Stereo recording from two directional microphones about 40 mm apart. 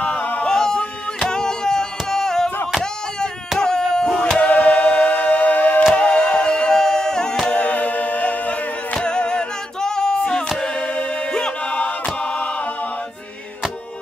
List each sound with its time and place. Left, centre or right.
0.4 s music: centre
2.8 s a sound: centre
4.4 s music: left
5.9 s music: left
7.5 s singing: left
8.9 s a sound: left
10.6 s music: left